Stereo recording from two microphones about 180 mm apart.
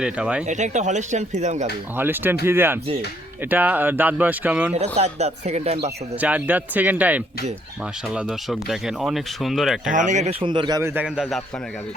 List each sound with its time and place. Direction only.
0.0 s speech: 5° right (ahead or behind)
0.4 s speech: 40° right (ahead or behind)
2.0 s speech: 10° right (ahead or behind)
4.7 s speech: 35° right (ahead or behind)
6.1 s speech: 10° right (ahead or behind)
9.9 s speech: 45° right (ahead or behind)
10.4 s speech: 25° right (ahead or behind); by 11.4 s centre (ahead or behind)